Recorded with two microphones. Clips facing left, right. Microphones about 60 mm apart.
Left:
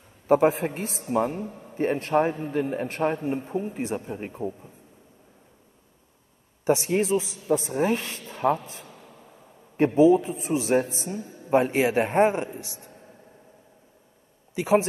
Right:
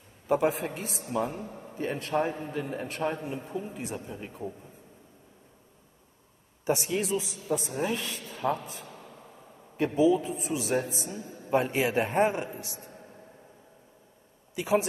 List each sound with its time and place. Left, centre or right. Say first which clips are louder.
0.3 s a man's voice: left 6 dB; left
6.6 s a man's voice: left 6 dB; left
9.8 s a man's voice: left 6 dB; left
11.5 s a man's voice: left 5 dB; left
12.4 s a man's voice: left 1 dB; right
14.5 s speech: left 5 dB; left